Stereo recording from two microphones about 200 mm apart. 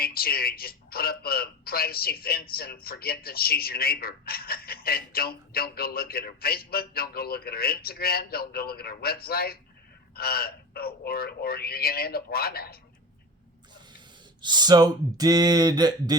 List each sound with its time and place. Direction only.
0.0 s a man's voice: 50° left (ahead or behind)
14.4 s speech: 20° right (ahead or behind)